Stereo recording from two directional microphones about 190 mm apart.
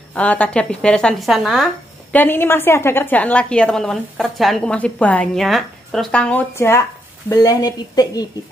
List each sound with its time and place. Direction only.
0.1 s speech: 5° left (ahead or behind)
2.1 s a woman's voice: 10° left (ahead or behind)